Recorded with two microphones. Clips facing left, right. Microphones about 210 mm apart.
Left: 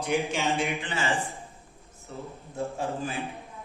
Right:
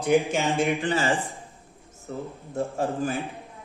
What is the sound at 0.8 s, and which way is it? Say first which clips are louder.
Speech: right 5 dB; 35° right (ahead or behind).